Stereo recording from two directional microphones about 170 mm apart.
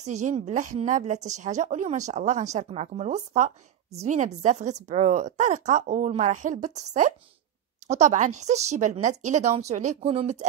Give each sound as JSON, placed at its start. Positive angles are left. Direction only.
{"t": 0.0, "sound": "a woman's voice", "side_deg": -45}